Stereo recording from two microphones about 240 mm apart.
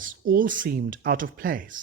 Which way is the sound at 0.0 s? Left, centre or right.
Right.